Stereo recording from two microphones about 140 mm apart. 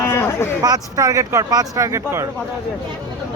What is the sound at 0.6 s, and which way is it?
Speech, 25° right (ahead or behind).